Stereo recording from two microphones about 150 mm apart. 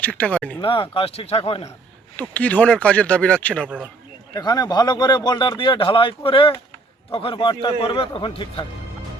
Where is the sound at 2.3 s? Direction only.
10° left (ahead or behind).